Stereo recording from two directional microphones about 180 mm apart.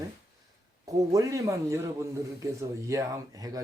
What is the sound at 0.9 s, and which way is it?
A man's voice, 20° right (ahead or behind).